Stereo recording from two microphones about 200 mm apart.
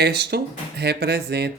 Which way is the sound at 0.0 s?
55° right (ahead or behind).